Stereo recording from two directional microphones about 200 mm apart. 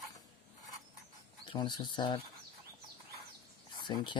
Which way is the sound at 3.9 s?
20° left (ahead or behind).